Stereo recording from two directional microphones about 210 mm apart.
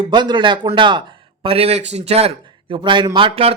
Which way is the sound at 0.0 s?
20° right (ahead or behind).